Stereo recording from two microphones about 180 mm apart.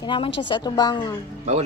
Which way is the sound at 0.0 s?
25° left (ahead or behind).